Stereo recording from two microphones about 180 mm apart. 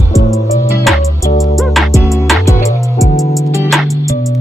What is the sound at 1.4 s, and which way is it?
Music, centre (ahead or behind).